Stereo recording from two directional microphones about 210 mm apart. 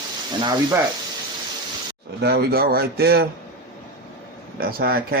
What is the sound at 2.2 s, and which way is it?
A man's voice, 50° right (ahead or behind).